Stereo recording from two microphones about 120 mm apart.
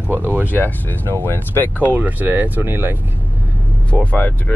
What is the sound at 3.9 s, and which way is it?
Speech, 15° left (ahead or behind).